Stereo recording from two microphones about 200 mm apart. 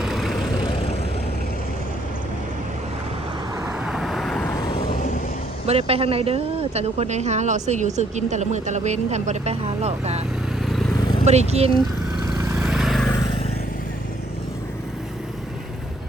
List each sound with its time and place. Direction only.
0.0 s vehicle: centre (ahead or behind)
3.7 s vehicle: centre (ahead or behind)
5.6 s speech: 30° right (ahead or behind)
10.7 s vehicle: centre (ahead or behind)
11.3 s speech: 30° right (ahead or behind)
12.5 s vehicle: centre (ahead or behind)